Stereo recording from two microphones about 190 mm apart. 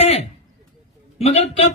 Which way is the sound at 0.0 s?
35° left (ahead or behind).